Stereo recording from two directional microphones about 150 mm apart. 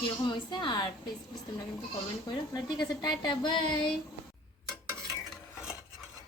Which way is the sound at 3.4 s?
30° left (ahead or behind).